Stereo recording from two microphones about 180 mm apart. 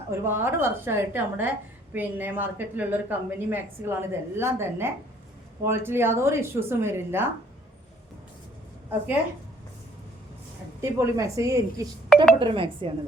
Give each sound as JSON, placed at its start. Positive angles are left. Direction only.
{"t": 0.1, "sound": "a woman's voice", "side_deg": -15}
{"t": 10.8, "sound": "a woman's voice", "side_deg": -15}
{"t": 12.0, "sound": "a sound", "side_deg": 5}
{"t": 12.4, "sound": "speech", "side_deg": -30}